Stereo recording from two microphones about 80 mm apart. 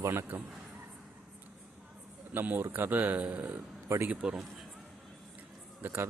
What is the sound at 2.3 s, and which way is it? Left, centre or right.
Speech, right.